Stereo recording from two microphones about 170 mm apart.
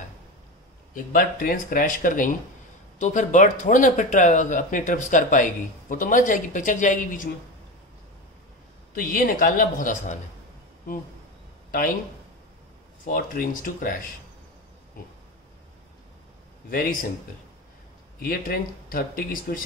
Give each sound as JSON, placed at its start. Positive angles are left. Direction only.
{"t": 1.1, "sound": "speech", "side_deg": 55}
{"t": 8.9, "sound": "speech", "side_deg": 55}
{"t": 13.0, "sound": "speech", "side_deg": 55}
{"t": 15.0, "sound": "pig", "side_deg": 55}
{"t": 16.7, "sound": "speech", "side_deg": 60}
{"t": 18.2, "sound": "speech", "side_deg": 60}